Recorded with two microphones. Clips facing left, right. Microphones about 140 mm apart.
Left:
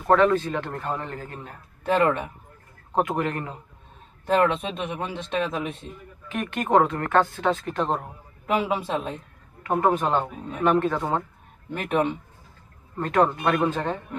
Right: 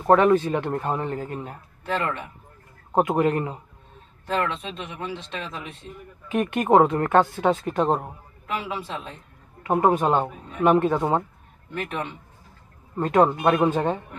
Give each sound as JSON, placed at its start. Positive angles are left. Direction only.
{"t": 0.0, "sound": "speech", "side_deg": -20}
{"t": 1.9, "sound": "speech", "side_deg": 50}
{"t": 3.0, "sound": "speech", "side_deg": -25}
{"t": 4.4, "sound": "speech", "side_deg": 55}
{"t": 6.3, "sound": "speech", "side_deg": -20}
{"t": 8.8, "sound": "speech", "side_deg": 50}
{"t": 9.6, "sound": "speech", "side_deg": -20}
{"t": 11.7, "sound": "speech", "side_deg": 50}
{"t": 12.9, "sound": "speech", "side_deg": -20}